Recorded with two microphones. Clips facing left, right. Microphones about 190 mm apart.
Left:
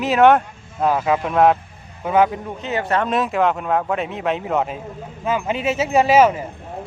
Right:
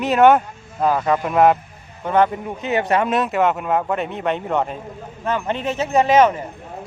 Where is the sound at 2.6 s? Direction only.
15° right (ahead or behind).